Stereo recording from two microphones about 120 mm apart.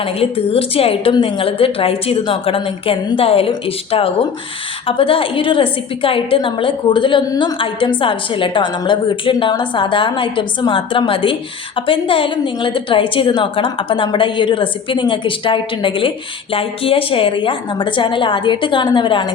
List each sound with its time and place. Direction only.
0.0 s a woman's voice: 55° left (ahead or behind)
4.9 s a woman's voice: 50° left (ahead or behind)